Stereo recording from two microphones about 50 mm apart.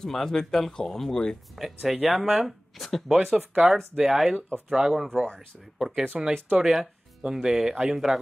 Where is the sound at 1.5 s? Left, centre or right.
Centre.